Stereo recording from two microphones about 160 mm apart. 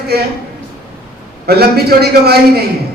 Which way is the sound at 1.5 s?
80° right.